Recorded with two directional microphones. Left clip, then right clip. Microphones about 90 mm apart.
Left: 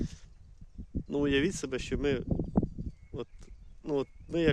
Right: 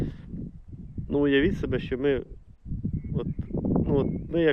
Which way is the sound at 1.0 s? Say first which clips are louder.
Right 6 dB; 35° left (ahead or behind).